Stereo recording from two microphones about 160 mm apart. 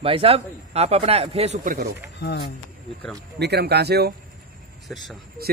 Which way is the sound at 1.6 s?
70° right (ahead or behind).